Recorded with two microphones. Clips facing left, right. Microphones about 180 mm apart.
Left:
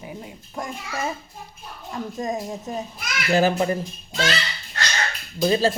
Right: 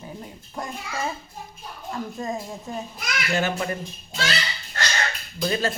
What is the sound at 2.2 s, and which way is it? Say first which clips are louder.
Speech: left 3 dB; 20° left (ahead or behind).